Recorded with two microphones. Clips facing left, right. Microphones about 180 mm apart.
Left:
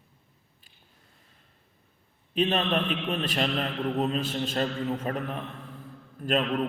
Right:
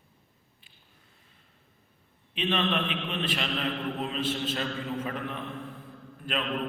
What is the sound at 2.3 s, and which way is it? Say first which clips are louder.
A man's voice: left 3 dB; 45° left (ahead or behind).